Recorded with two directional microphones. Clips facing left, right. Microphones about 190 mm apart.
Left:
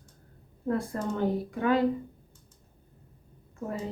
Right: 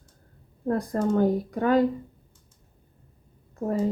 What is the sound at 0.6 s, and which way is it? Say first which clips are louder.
A woman's voice: right 5 dB; 40° right (ahead or behind).